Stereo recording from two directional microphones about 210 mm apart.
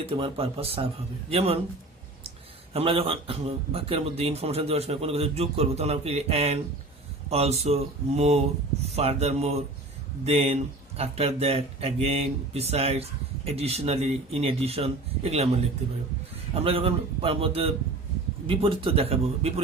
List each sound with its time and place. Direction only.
0.0 s speech: 25° right (ahead or behind)
2.7 s speech: 25° right (ahead or behind)
16.6 s speech: 25° right (ahead or behind)